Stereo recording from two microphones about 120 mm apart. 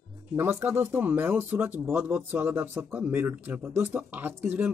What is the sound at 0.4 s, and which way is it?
Speech, 20° right (ahead or behind).